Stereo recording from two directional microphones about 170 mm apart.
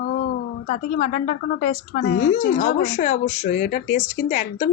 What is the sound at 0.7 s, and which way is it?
Speech, 50° left (ahead or behind).